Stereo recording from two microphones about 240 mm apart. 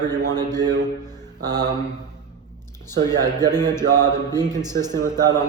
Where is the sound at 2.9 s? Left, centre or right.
Centre.